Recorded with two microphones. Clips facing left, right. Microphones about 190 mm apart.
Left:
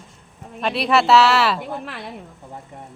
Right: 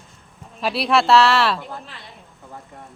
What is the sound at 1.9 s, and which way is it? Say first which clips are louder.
Speech: left 9 dB; 65° left (ahead or behind).